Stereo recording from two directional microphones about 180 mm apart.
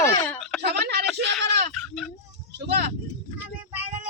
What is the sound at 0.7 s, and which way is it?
Speech, 65° right (ahead or behind).